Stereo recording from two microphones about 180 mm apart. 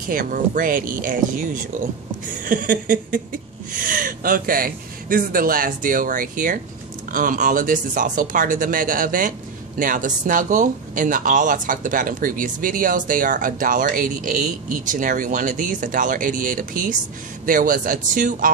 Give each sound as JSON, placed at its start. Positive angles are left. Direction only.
{"t": 0.0, "sound": "speech", "side_deg": -50}